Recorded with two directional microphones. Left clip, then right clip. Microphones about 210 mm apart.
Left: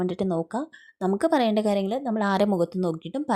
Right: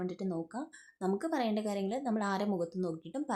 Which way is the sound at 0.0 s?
30° left (ahead or behind).